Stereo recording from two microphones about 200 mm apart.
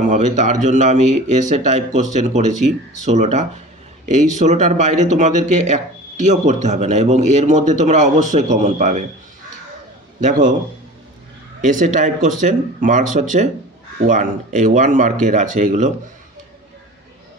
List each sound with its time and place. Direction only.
0.0 s speech: 35° right (ahead or behind)
11.6 s speech: 40° right (ahead or behind)